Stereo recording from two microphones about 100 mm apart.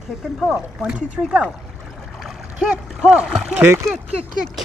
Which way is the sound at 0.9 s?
10° right (ahead or behind).